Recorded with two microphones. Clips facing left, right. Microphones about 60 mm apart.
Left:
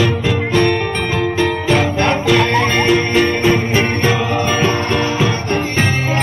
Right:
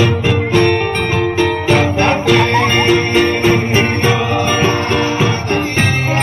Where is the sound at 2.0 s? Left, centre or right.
Right.